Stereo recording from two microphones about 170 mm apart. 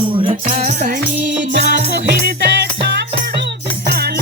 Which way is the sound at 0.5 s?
50° right (ahead or behind).